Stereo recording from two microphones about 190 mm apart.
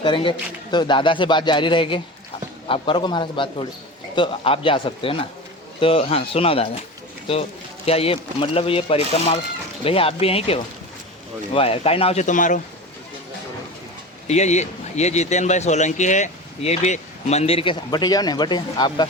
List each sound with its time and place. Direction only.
0.0 s a man's voice: 25° left (ahead or behind)
7.9 s a man's voice: 30° left (ahead or behind)
14.3 s a man's voice: 35° left (ahead or behind)